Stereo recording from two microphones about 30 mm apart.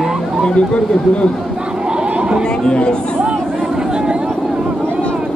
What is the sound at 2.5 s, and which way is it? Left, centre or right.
Speech, left.